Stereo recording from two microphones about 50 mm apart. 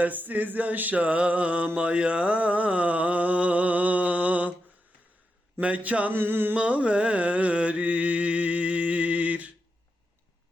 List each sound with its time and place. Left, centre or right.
0.0 s mantra: right
5.5 s mantra: right
6.1 s a sound: right
6.6 s carnatic music: right